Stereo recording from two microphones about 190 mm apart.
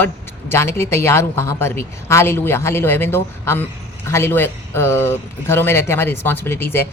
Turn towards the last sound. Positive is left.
turn(degrees=10)  # may be behind; listen again after turning